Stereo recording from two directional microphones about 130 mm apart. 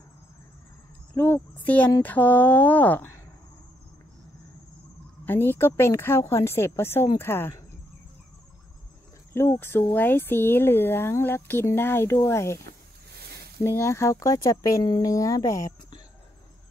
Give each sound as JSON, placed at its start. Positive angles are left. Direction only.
{"t": 1.1, "sound": "speech", "side_deg": 15}
{"t": 5.2, "sound": "speech", "side_deg": 15}
{"t": 9.3, "sound": "speech", "side_deg": 15}
{"t": 13.6, "sound": "speech", "side_deg": 20}